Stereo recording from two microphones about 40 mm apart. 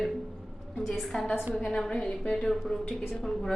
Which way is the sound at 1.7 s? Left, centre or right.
Centre.